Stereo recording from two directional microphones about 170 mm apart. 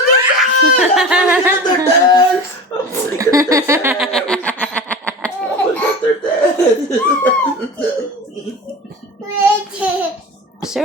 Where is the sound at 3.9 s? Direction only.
Centre (ahead or behind).